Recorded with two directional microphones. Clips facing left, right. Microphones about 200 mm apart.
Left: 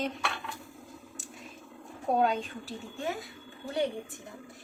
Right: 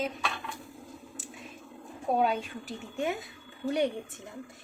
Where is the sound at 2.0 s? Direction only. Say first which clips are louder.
Even; 5° right (ahead or behind).